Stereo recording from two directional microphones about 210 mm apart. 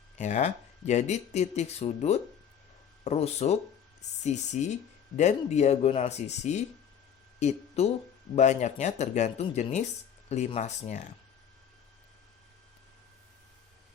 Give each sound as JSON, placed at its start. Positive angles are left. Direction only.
{"t": 0.2, "sound": "speech", "side_deg": 35}